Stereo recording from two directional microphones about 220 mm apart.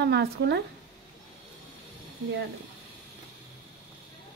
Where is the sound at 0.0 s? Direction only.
50° right (ahead or behind).